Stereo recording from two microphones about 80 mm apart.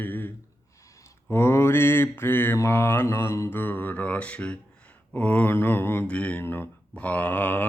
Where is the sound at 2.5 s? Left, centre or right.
Left; by 5.5 s centre.